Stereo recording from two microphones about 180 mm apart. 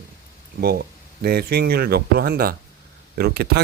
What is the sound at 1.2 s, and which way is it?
Speech, 55° right (ahead or behind).